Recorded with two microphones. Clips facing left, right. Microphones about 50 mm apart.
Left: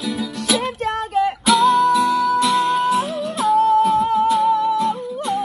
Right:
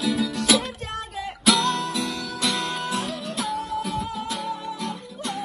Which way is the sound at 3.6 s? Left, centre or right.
Left.